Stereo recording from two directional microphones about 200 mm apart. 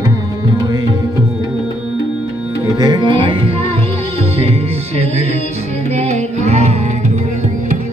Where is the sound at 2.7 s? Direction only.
20° right (ahead or behind).